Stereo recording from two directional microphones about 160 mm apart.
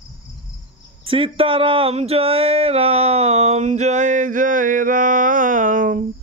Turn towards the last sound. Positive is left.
turn(degrees=-60)  # may be behind; listen again after turning